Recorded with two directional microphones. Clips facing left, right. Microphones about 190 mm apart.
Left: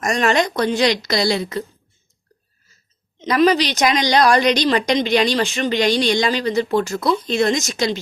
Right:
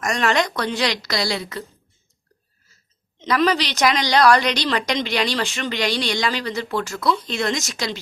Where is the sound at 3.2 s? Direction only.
15° left (ahead or behind).